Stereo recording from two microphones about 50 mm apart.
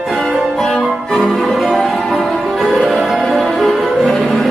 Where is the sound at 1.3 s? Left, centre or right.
Centre.